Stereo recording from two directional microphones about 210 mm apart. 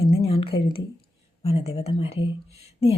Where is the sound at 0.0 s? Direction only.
25° left (ahead or behind).